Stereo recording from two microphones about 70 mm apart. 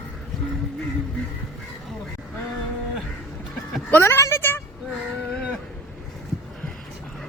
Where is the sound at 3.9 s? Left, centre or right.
Left.